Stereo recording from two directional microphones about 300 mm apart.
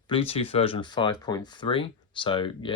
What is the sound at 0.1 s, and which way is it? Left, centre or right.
Speech, centre.